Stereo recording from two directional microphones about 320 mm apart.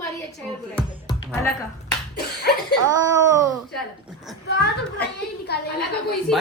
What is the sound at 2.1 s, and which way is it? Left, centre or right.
Slap, left.